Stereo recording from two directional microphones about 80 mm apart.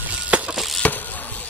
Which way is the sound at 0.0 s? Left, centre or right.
Centre.